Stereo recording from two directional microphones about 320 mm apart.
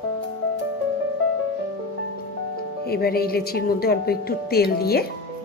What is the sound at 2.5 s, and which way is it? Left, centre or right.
Speech, left.